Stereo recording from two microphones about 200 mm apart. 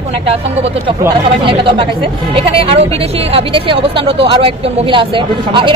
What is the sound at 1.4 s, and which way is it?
Speech, 25° right (ahead or behind).